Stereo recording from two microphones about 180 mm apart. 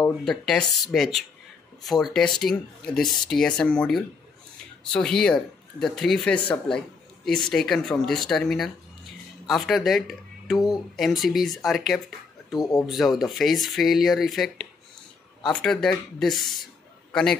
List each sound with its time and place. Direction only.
0.0 s a man's voice: centre (ahead or behind)